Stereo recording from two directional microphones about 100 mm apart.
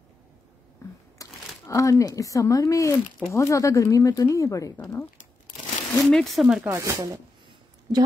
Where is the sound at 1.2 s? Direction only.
35° left (ahead or behind).